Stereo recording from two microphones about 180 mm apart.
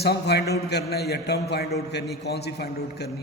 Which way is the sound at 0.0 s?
65° left (ahead or behind).